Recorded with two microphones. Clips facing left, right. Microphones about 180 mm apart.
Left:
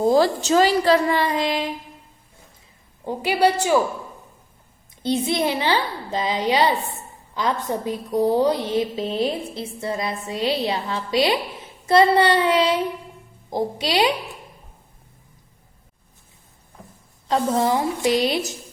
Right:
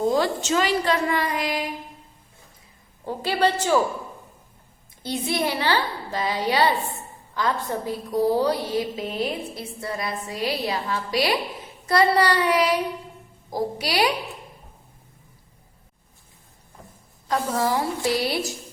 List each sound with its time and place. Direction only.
0.0 s a woman's voice: 35° left (ahead or behind)
3.1 s a woman's voice: 15° left (ahead or behind)
5.0 s a woman's voice: 20° left (ahead or behind)
17.2 s a woman's voice: 25° left (ahead or behind)